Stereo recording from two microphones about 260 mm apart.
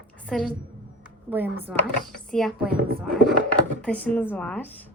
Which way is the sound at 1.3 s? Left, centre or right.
Centre.